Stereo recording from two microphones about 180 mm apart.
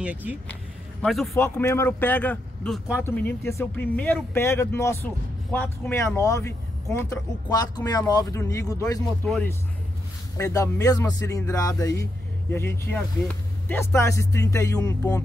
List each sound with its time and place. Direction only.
0.0 s a man's voice: 10° right (ahead or behind)
1.3 s speech: 15° left (ahead or behind)
9.2 s speech: 10° left (ahead or behind)